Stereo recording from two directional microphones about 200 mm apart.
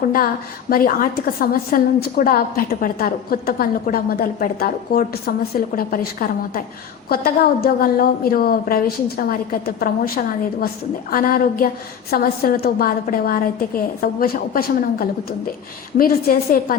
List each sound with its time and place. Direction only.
0.7 s a woman's voice: 45° left (ahead or behind)